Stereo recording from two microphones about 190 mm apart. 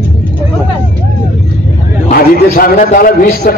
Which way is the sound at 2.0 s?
50° left (ahead or behind).